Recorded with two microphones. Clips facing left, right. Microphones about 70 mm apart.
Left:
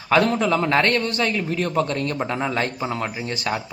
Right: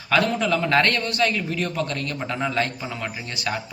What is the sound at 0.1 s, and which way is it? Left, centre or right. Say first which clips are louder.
A man's voice: left 3 dB; left.